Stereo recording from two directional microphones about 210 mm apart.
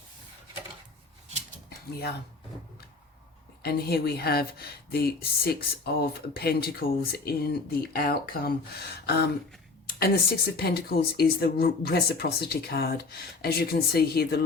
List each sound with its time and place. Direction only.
3.6 s speech: 50° left (ahead or behind)